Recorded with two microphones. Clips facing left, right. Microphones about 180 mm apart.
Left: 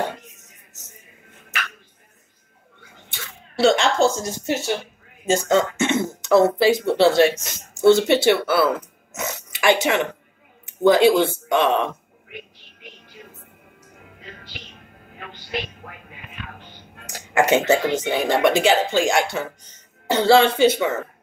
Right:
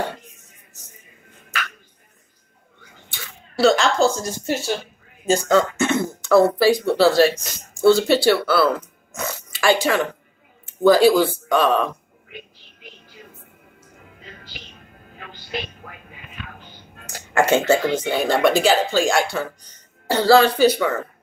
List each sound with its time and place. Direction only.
3.5 s speech: 25° left (ahead or behind)
17.3 s a sound: 15° left (ahead or behind)
18.1 s speech: 20° left (ahead or behind)